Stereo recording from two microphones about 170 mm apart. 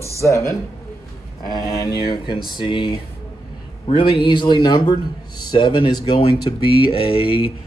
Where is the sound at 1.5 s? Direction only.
20° left (ahead or behind).